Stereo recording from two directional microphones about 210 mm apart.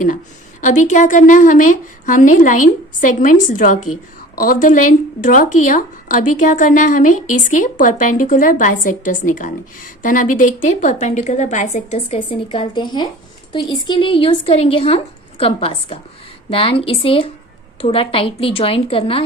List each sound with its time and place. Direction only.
0.6 s speech: 35° left (ahead or behind)
7.1 s speech: 90° left
7.5 s speech: 40° left (ahead or behind)